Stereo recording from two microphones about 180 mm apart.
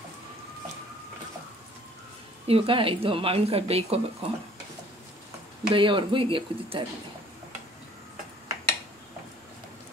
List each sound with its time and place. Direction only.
2.4 s speech: 30° right (ahead or behind)
5.7 s speech: 25° right (ahead or behind)